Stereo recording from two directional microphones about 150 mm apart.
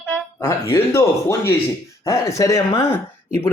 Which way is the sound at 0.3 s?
15° left (ahead or behind).